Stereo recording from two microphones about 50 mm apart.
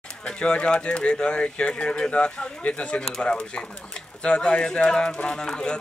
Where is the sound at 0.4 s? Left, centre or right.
Left.